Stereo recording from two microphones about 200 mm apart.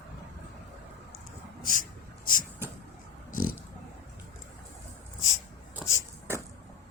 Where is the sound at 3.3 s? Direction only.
45° left (ahead or behind).